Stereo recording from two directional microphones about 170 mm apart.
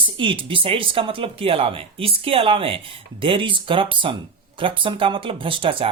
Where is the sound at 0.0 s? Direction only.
30° right (ahead or behind).